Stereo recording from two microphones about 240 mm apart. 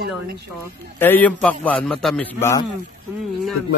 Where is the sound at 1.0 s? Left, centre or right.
Centre.